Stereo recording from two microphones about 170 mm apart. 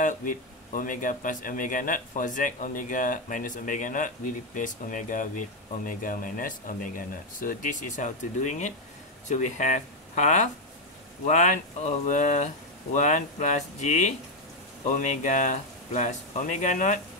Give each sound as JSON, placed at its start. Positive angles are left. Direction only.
{"t": 0.0, "sound": "a man's voice", "side_deg": 50}